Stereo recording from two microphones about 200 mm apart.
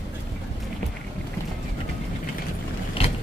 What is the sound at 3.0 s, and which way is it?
Vehicle, 25° left (ahead or behind).